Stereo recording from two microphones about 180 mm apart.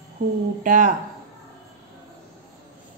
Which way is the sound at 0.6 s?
45° right (ahead or behind).